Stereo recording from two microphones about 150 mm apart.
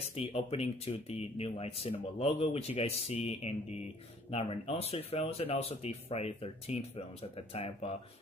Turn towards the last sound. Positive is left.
turn(degrees=40)  # may be behind; listen again after turning